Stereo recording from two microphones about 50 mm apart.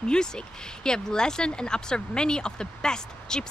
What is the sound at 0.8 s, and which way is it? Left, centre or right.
Speech, centre.